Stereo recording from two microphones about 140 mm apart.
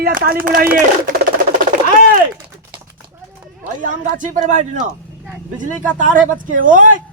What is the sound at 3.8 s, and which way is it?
A man's voice, 65° right (ahead or behind).